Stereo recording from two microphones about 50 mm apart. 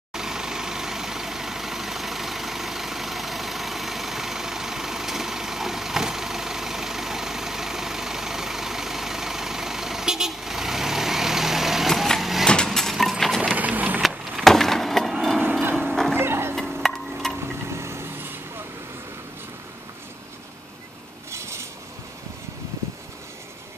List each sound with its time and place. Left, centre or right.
0.1 s vehicle: centre
12.6 s keys jangling: centre
13.6 s wood: right
14.0 s wood: centre
15.9 s music: centre
16.2 s music: right
16.5 s chop: centre
17.6 s vehicle: right
21.3 s a sound: right